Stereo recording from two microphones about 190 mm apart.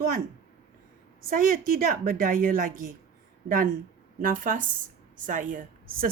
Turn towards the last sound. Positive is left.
turn(degrees=-45)  # may be behind; listen again after turning